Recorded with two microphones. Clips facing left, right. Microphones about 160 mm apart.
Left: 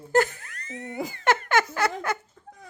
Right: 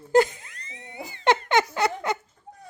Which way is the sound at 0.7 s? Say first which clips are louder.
Left 10 dB; 45° left (ahead or behind).